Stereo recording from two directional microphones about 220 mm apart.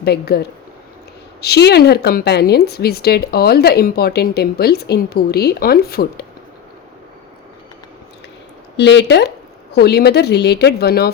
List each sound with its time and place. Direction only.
0.0 s a woman's voice: 45° left (ahead or behind)
8.7 s a woman's voice: 50° left (ahead or behind)